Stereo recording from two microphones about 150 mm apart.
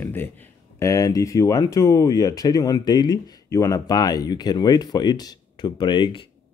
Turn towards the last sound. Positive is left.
turn(degrees=35)  # may be behind; listen again after turning